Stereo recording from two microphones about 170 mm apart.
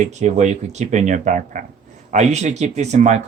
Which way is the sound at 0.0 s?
45° right (ahead or behind).